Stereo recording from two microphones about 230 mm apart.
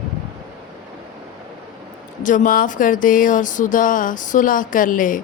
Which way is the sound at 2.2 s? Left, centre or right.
Left.